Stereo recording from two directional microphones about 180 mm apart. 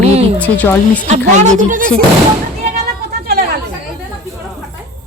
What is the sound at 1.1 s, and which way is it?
Speech, 40° right (ahead or behind).